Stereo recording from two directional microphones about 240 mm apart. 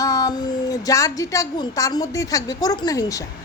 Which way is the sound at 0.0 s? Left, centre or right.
Centre.